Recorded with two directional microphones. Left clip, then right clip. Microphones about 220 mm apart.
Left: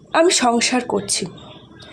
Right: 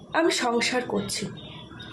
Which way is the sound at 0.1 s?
40° left (ahead or behind).